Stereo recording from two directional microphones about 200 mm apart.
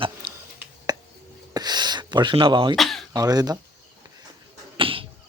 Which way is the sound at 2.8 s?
Centre (ahead or behind).